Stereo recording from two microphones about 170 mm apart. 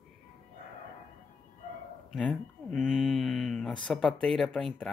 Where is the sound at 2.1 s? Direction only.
5° left (ahead or behind).